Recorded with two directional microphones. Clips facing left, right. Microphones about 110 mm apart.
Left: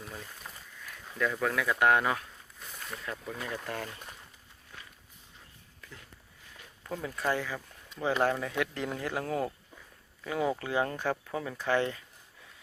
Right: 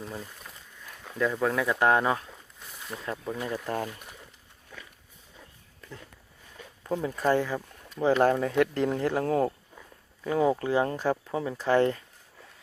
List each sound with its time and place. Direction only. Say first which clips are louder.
0.0 s speech: right 5 dB; 25° right (ahead or behind)
6.8 s speech: right 6 dB; 30° right (ahead or behind)